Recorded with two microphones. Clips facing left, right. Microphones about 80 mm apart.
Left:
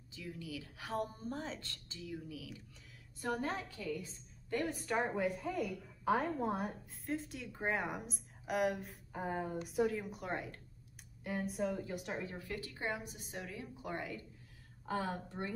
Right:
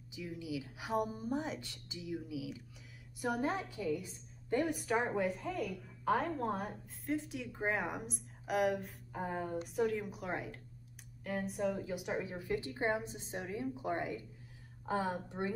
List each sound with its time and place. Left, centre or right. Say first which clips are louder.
0.1 s speech: right 4 dB; centre
4.7 s a woman's voice: right 2 dB; centre